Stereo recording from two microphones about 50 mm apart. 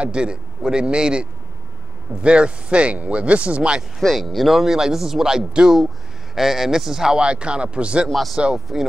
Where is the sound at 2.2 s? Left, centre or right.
Right.